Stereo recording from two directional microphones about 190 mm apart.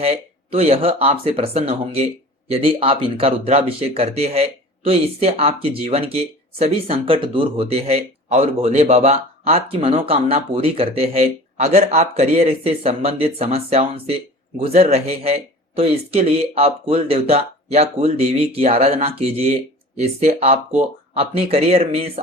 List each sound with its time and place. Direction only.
0.0 s speech: 30° right (ahead or behind)